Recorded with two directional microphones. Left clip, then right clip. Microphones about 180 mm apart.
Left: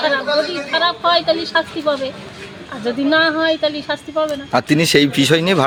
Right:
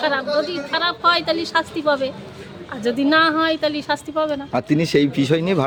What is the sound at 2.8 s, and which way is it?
A woman's voice, 30° right (ahead or behind).